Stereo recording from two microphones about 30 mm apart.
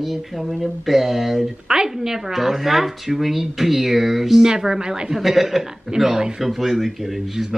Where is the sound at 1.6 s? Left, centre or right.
Centre.